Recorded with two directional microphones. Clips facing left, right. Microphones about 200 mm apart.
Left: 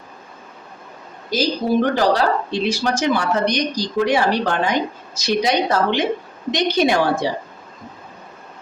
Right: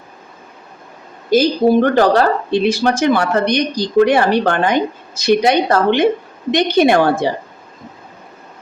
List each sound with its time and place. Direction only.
1.3 s speech: 55° right (ahead or behind)